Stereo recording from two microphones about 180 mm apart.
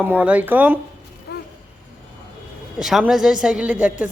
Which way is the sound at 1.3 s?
60° left (ahead or behind).